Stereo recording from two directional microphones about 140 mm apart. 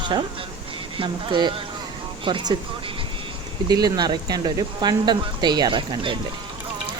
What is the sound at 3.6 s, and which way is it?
Speech, 30° right (ahead or behind).